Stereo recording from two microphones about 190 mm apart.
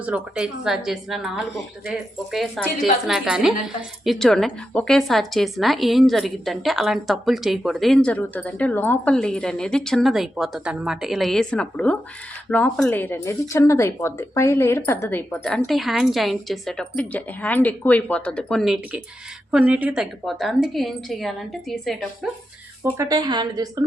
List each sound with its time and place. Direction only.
0.0 s speech: 5° right (ahead or behind)
22.8 s a woman's voice: 15° right (ahead or behind)